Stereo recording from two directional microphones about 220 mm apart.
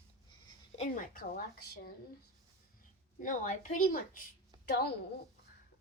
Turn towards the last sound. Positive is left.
turn(degrees=45)  # may be behind; listen again after turning